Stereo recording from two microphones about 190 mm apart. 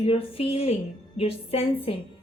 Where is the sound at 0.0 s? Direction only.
30° left (ahead or behind).